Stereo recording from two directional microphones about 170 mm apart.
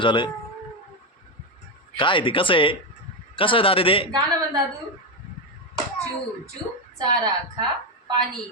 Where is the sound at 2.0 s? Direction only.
30° left (ahead or behind).